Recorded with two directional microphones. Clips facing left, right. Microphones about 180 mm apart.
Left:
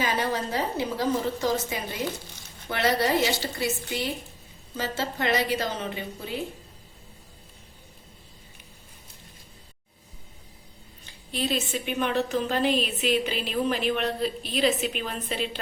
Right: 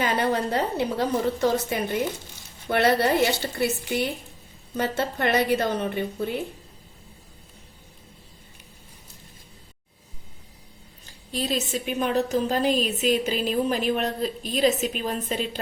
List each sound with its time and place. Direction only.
0.0 s a woman's voice: 60° right (ahead or behind)
11.0 s a woman's voice: 40° right (ahead or behind)